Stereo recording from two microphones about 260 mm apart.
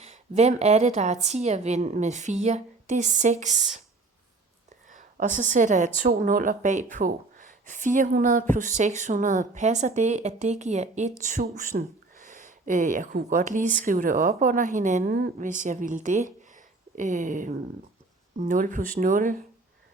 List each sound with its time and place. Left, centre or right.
0.0 s a woman's voice: right
4.9 s a woman's voice: right